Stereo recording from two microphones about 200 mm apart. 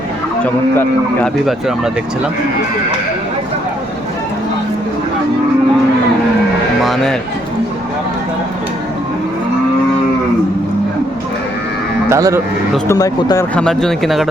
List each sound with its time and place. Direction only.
0.4 s speech: 5° left (ahead or behind)
6.8 s speech: centre (ahead or behind)
12.0 s speech: 15° right (ahead or behind)
12.9 s speech: 15° left (ahead or behind)
13.6 s speech: 5° left (ahead or behind)